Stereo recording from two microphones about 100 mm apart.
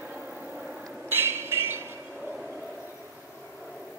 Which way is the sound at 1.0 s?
25° right (ahead or behind).